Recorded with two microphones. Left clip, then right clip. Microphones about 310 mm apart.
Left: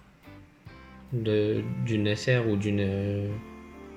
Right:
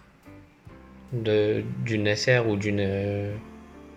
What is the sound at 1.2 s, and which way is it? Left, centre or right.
Speech, centre.